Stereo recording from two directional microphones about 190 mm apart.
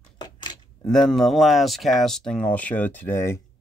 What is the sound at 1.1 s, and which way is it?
Speech, centre (ahead or behind).